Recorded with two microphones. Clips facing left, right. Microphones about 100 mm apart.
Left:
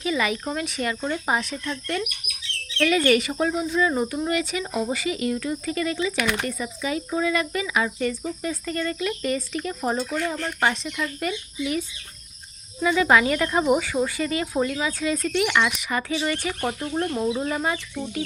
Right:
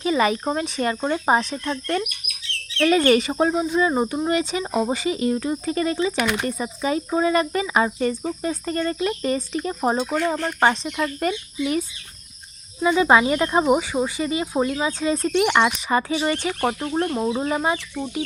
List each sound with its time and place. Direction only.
0.0 s speech: 35° right (ahead or behind)
12.8 s speech: 25° right (ahead or behind)